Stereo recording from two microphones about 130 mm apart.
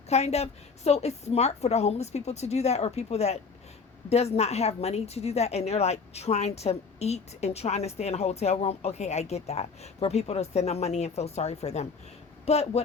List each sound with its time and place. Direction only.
0.1 s a woman's voice: 55° left (ahead or behind)